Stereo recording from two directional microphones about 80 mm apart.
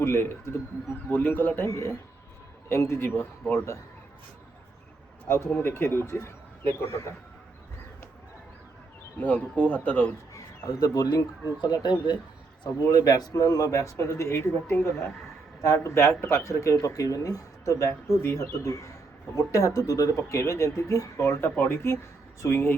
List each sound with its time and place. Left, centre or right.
0.0 s speech: left
1.1 s speech: left
1.6 s speech: left
3.4 s a man's voice: centre
5.3 s speech: left
9.2 s speech: left
10.3 s speech: left
11.6 s speech: left
22.4 s speech: left